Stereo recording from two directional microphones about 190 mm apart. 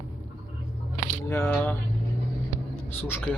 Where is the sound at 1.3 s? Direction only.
10° left (ahead or behind).